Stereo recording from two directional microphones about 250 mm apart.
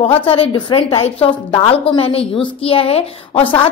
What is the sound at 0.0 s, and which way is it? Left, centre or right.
A woman's voice, left.